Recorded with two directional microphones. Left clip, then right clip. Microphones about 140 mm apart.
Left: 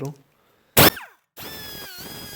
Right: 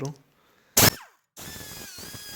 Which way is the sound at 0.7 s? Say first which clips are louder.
Left 5 dB; 40° left (ahead or behind).